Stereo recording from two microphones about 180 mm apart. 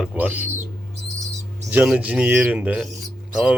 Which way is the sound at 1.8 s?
5° right (ahead or behind).